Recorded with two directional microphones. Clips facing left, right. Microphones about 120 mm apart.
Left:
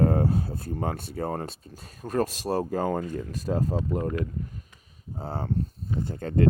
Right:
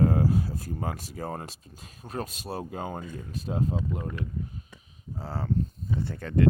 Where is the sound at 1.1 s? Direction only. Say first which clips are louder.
Left 5 dB; 50° left (ahead or behind).